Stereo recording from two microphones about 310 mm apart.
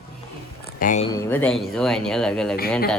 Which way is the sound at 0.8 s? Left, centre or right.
Left.